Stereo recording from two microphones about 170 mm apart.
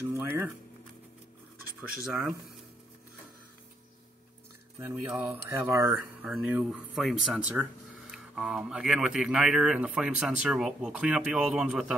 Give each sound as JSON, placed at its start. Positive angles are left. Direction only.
{"t": 0.0, "sound": "a sound", "side_deg": -15}
{"t": 2.0, "sound": "speech", "side_deg": 0}
{"t": 4.7, "sound": "mantra", "side_deg": -15}
{"t": 6.2, "sound": "speech", "side_deg": -5}